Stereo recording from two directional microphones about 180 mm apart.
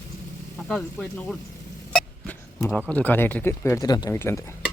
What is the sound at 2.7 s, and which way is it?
Speech, 5° left (ahead or behind).